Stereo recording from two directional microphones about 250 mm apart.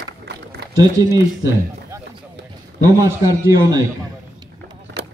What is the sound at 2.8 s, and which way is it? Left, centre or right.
Speech, centre.